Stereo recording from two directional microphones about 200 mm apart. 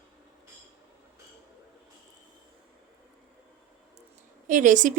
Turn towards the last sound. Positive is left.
turn(degrees=-40)  # may be behind; listen again after turning